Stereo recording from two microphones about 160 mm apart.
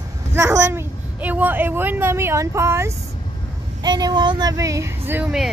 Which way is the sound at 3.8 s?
25° right (ahead or behind).